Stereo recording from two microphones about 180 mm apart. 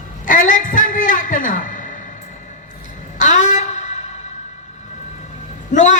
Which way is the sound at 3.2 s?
45° left (ahead or behind).